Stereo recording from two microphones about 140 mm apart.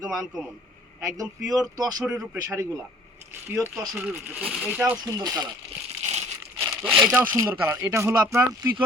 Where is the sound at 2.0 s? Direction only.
10° right (ahead or behind).